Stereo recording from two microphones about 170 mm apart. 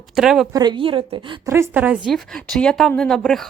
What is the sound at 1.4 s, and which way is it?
Speech, 15° right (ahead or behind).